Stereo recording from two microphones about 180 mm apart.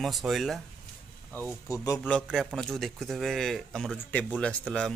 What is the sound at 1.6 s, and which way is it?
Speech, 15° left (ahead or behind).